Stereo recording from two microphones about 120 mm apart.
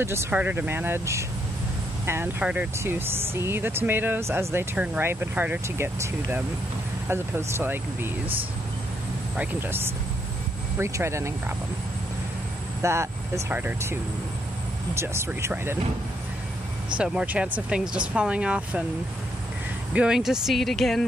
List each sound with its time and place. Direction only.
0.0 s speech: 20° right (ahead or behind)
2.8 s speech: 20° right (ahead or behind)
9.4 s speech: 20° right (ahead or behind)
12.8 s speech: 25° right (ahead or behind)
15.0 s speech: 20° right (ahead or behind)
16.9 s speech: 10° right (ahead or behind)
19.9 s speech: 10° right (ahead or behind)